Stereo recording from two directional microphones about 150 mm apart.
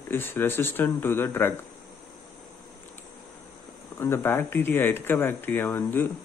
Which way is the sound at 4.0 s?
15° left (ahead or behind).